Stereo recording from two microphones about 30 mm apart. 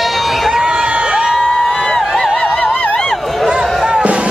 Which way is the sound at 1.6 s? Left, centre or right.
Centre.